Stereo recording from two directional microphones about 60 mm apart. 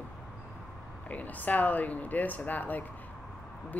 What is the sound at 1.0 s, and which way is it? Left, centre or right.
A woman's voice, left.